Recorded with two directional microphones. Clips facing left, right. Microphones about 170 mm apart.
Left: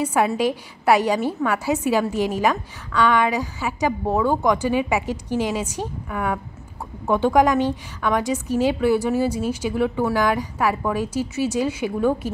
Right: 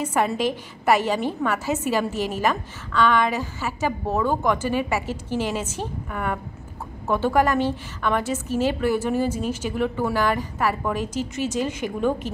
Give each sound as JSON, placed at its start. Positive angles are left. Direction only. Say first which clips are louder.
{"t": 0.0, "sound": "a woman's voice", "louder": "left 3 dB", "side_deg": 10}